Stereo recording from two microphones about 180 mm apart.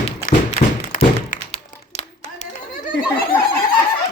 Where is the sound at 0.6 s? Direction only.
40° left (ahead or behind).